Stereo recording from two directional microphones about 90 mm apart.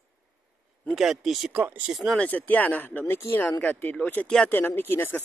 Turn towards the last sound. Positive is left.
turn(degrees=25)  # may be behind; listen again after turning